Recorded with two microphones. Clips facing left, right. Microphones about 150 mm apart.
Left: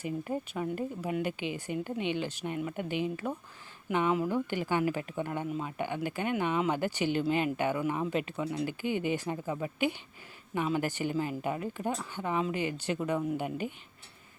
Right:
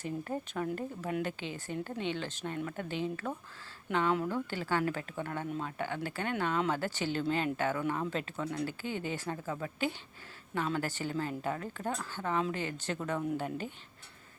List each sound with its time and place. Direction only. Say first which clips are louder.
0.0 s speech: left 3 dB; 10° left (ahead or behind)
4.3 s speech: left 3 dB; 15° left (ahead or behind)
5.5 s speech: left 2 dB; 5° left (ahead or behind)
5.7 s speech: left 3 dB; 15° left (ahead or behind)